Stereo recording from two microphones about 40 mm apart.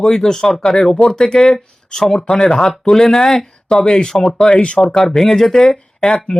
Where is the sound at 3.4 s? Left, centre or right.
Left.